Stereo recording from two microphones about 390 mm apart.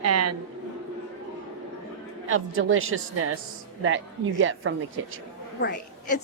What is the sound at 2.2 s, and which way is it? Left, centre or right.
A woman's voice, right.